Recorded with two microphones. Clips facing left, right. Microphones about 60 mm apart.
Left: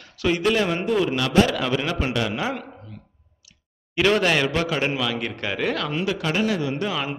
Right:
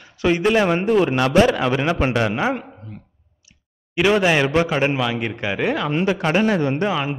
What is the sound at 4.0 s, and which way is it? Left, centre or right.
Speech, centre.